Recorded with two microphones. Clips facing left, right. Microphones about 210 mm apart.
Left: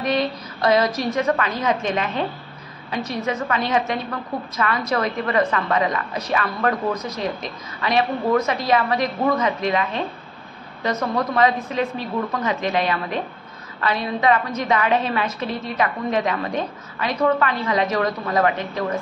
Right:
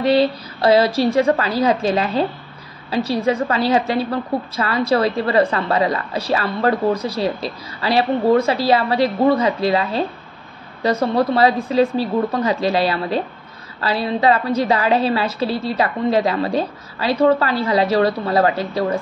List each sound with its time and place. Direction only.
0.0 s a woman's voice: 30° right (ahead or behind)